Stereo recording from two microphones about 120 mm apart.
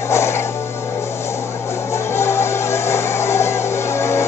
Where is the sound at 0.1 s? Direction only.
25° left (ahead or behind).